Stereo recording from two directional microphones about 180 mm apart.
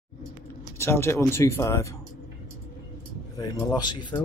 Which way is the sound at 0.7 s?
15° left (ahead or behind).